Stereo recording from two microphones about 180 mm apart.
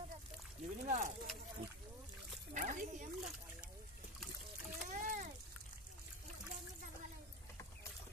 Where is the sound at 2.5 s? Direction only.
50° right (ahead or behind).